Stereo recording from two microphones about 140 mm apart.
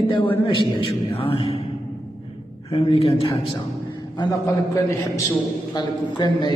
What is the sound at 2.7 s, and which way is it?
Speech, 40° left (ahead or behind).